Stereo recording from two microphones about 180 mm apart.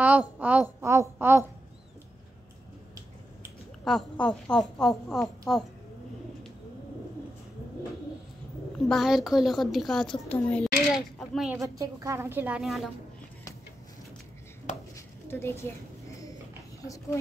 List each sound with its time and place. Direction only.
0.0 s a woman's voice: 10° right (ahead or behind)
3.8 s a woman's voice: 5° left (ahead or behind)
8.7 s a woman's voice: centre (ahead or behind)
11.6 s a woman's voice: 20° right (ahead or behind); by 12.9 s centre (ahead or behind)
15.2 s a sound: 15° left (ahead or behind)
16.8 s speech: 20° left (ahead or behind)